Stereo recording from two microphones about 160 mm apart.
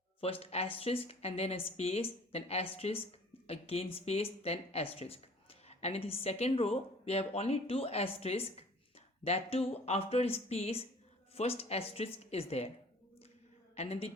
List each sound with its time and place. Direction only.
0.2 s speech: 40° left (ahead or behind)
13.7 s speech: 40° left (ahead or behind)